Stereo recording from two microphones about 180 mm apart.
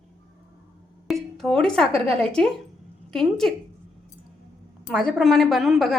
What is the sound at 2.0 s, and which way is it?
A woman's voice, 5° left (ahead or behind).